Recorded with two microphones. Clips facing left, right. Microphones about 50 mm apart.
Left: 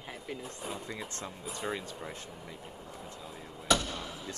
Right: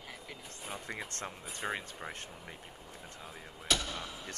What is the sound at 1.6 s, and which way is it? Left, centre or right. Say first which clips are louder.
Speech: left 1 dB; right.